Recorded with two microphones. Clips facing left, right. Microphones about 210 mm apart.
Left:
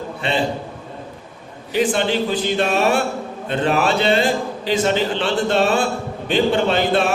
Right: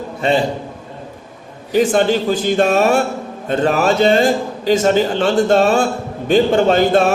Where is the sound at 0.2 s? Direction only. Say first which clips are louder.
Right 7 dB; 40° right (ahead or behind).